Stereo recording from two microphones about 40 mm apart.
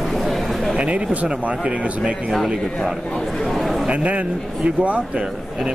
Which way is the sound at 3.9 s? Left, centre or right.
Right.